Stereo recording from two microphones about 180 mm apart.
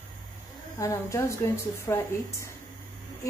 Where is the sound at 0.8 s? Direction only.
15° left (ahead or behind).